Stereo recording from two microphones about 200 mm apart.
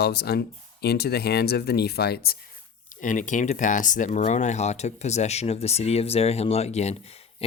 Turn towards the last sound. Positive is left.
turn(degrees=35)  # may be behind; listen again after turning